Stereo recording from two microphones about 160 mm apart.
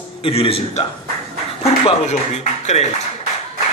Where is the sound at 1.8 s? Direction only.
40° left (ahead or behind).